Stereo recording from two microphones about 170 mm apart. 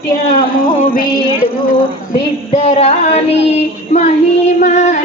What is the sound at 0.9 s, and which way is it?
Music, 55° left (ahead or behind).